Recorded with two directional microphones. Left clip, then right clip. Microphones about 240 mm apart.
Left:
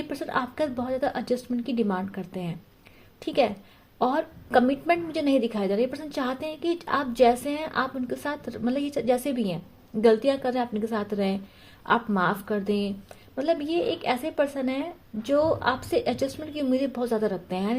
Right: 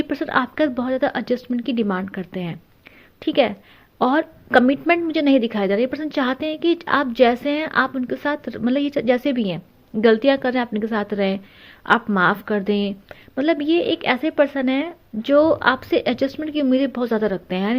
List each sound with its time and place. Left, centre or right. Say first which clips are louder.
0.1 s a woman's voice: right 4 dB; right